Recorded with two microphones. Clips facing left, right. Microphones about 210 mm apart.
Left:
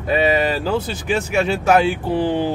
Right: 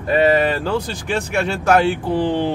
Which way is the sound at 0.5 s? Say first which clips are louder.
Even; 5° left (ahead or behind).